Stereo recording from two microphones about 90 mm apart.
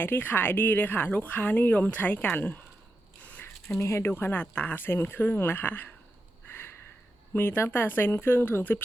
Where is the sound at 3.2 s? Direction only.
15° left (ahead or behind).